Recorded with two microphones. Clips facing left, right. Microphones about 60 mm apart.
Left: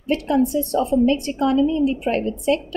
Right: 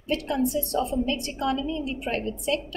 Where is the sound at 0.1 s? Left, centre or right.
Left.